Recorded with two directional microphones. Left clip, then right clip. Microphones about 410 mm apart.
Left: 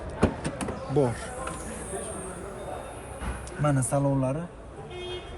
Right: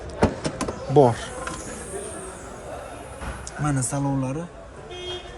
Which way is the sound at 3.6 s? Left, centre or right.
Centre.